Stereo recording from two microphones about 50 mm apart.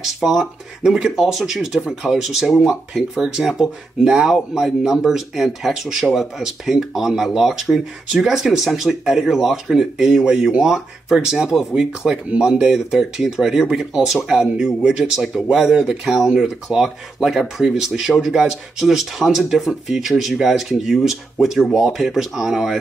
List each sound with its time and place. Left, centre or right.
0.0 s speech: centre
12.7 s speech: centre